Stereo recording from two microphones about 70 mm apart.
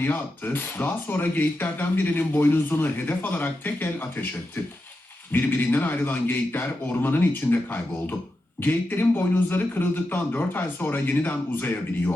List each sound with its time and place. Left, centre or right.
0.0 s speech: left